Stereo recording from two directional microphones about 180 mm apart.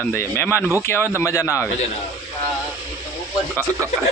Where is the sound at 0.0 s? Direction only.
10° left (ahead or behind).